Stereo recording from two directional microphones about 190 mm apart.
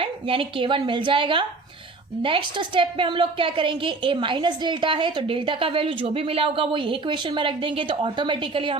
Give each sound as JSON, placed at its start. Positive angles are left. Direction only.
{"t": 0.0, "sound": "a woman's voice", "side_deg": -30}